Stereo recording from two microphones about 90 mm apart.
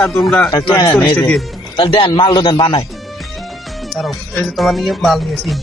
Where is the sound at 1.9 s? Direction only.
60° left (ahead or behind); by 2.8 s 75° left (ahead or behind).